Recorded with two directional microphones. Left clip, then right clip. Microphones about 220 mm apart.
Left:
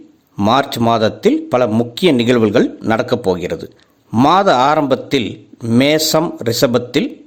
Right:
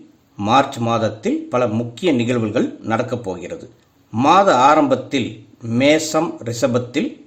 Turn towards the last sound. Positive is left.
turn(degrees=40)  # may be behind; listen again after turning